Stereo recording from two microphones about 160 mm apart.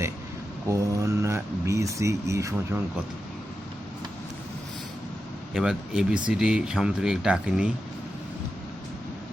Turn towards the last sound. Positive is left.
turn(degrees=-5)  # may be behind; listen again after turning